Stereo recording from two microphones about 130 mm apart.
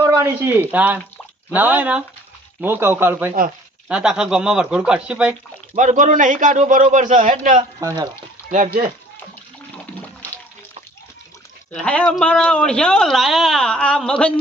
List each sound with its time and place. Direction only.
0.0 s speech: 20° right (ahead or behind)
5.7 s a man's voice: 75° right (ahead or behind)
11.7 s a man's voice: 10° left (ahead or behind)